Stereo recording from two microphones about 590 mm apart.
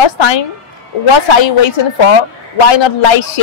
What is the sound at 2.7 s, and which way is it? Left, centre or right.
Speech, left.